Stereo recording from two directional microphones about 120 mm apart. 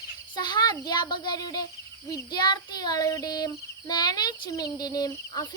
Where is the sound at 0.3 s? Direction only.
40° left (ahead or behind).